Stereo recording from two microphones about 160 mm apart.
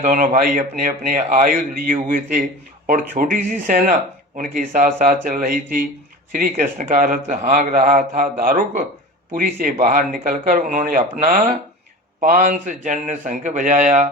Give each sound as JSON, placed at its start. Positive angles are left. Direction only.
{"t": 0.0, "sound": "a man's voice", "side_deg": -50}